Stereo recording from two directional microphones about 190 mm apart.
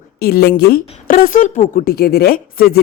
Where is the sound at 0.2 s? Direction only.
55° left (ahead or behind).